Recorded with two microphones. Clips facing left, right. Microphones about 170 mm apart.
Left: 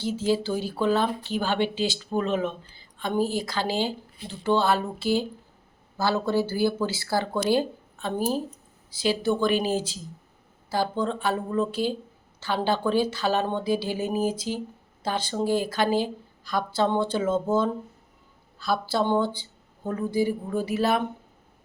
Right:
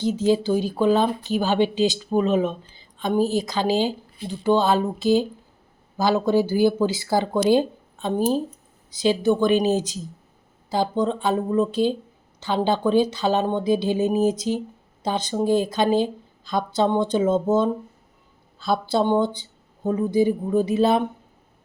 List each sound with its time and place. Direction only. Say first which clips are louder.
0.0 s a woman's voice: right 5 dB; 20° right (ahead or behind)